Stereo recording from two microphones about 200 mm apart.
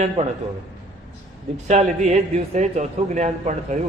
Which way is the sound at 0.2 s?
30° right (ahead or behind).